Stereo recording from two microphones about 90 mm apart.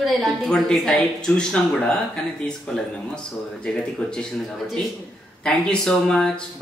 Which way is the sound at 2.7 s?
10° left (ahead or behind).